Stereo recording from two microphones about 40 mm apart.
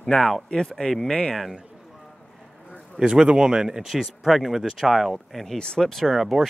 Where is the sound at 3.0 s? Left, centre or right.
Centre.